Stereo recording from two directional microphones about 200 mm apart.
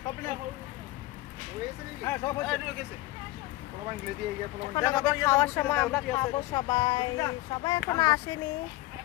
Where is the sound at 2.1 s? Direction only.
15° left (ahead or behind).